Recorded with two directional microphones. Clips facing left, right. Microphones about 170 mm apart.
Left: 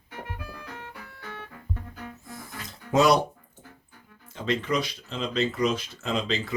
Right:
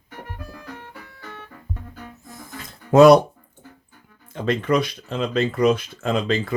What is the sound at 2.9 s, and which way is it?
Speech, 55° right (ahead or behind).